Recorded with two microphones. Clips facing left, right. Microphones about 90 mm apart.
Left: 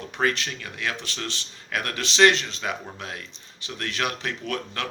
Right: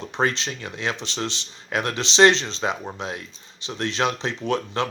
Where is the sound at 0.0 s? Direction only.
25° right (ahead or behind).